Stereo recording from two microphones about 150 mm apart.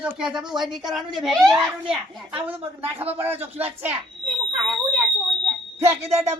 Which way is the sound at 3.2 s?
15° right (ahead or behind).